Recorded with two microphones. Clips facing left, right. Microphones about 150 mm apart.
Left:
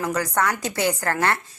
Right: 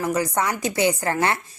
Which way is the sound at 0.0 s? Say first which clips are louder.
Right 1 dB; 10° right (ahead or behind).